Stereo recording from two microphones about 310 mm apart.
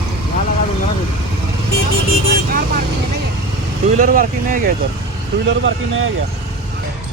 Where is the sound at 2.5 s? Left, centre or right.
Right.